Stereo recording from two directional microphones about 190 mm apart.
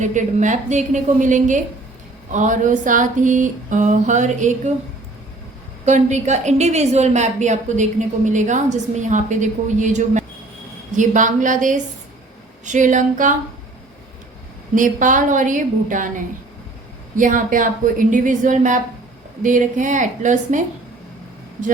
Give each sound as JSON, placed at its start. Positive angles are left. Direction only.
{"t": 0.0, "sound": "a woman's voice", "side_deg": -40}
{"t": 5.8, "sound": "a woman's voice", "side_deg": -40}
{"t": 14.8, "sound": "a woman's voice", "side_deg": -45}